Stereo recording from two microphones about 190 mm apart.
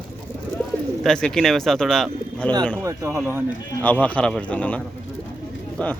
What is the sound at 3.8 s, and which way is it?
Speech, 10° left (ahead or behind).